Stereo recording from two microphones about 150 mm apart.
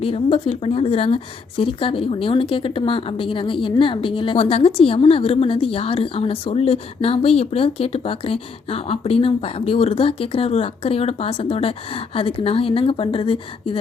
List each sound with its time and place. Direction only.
0.0 s a woman's voice: 35° left (ahead or behind)